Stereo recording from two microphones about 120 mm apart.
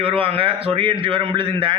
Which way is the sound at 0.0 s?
50° right (ahead or behind).